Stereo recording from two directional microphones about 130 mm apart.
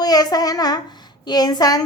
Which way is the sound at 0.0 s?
30° left (ahead or behind).